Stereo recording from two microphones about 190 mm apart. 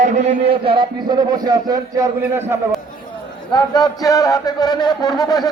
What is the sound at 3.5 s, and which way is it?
Speech, 20° left (ahead or behind).